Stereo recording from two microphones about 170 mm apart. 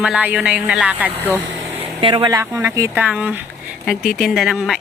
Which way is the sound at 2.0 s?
30° right (ahead or behind).